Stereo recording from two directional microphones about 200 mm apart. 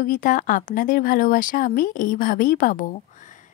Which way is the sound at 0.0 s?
45° left (ahead or behind).